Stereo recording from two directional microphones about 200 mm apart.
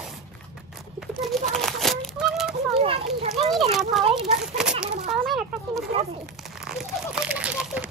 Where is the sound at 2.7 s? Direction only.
30° right (ahead or behind).